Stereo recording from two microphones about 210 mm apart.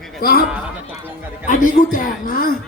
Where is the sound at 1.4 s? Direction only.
40° left (ahead or behind).